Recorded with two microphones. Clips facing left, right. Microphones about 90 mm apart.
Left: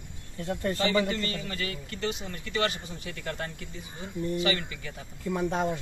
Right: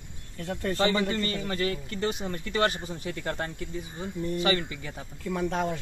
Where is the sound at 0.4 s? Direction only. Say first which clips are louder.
Left 1 dB; 15° left (ahead or behind).